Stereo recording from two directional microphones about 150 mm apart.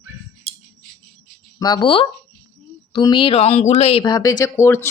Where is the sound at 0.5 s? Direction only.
45° right (ahead or behind).